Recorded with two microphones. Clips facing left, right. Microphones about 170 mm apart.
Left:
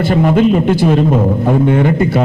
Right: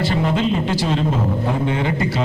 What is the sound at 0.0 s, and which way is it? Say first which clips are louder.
A man's voice: left 8 dB; 55° left (ahead or behind).